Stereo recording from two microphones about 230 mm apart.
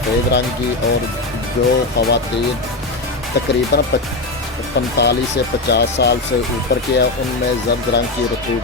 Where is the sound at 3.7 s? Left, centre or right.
Left.